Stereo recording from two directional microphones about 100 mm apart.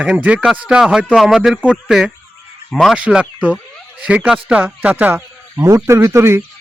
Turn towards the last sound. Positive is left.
turn(degrees=-25)  # may be behind; listen again after turning